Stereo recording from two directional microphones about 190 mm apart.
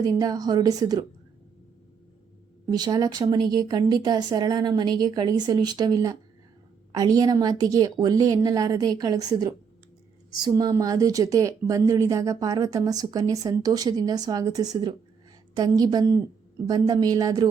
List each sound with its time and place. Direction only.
0.0 s speech: 20° right (ahead or behind)
2.6 s speech: 20° right (ahead or behind)